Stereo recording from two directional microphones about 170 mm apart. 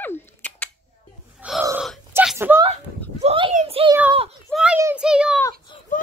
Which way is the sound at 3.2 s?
30° right (ahead or behind).